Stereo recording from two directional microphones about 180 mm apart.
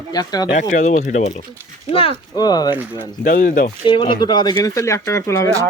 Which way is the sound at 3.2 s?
50° left (ahead or behind).